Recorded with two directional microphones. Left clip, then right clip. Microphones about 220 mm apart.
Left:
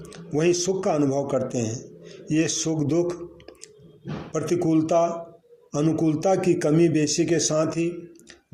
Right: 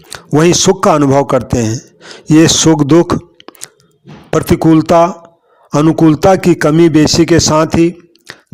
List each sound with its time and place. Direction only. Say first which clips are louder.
0.1 s a man's voice: right 12 dB; 45° right (ahead or behind)